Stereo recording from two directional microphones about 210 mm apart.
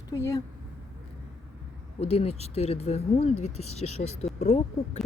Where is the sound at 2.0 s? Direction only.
30° left (ahead or behind).